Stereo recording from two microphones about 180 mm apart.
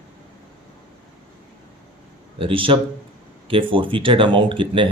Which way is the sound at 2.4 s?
30° right (ahead or behind).